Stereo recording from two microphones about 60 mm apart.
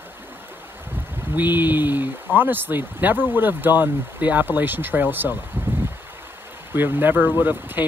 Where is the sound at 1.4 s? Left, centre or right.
Right.